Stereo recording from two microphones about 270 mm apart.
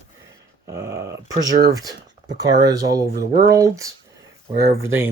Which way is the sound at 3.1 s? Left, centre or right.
Right.